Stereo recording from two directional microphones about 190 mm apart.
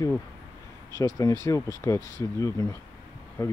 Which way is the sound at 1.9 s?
20° right (ahead or behind).